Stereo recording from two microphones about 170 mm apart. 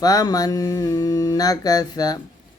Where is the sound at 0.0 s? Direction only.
20° left (ahead or behind).